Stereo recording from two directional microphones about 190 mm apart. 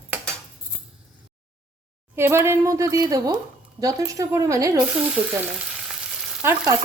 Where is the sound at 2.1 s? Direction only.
15° right (ahead or behind).